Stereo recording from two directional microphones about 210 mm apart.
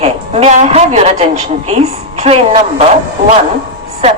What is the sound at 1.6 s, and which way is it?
A woman's voice, 30° right (ahead or behind).